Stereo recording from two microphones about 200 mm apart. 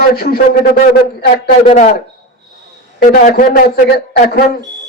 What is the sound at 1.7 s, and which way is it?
Speech, 35° left (ahead or behind).